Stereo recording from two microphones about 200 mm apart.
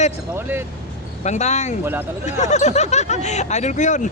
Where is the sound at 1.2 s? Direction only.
35° left (ahead or behind).